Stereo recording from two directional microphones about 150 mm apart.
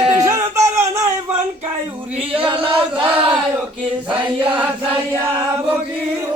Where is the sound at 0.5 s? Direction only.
20° right (ahead or behind).